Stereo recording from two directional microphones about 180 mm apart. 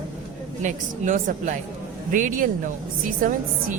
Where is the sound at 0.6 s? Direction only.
45° right (ahead or behind).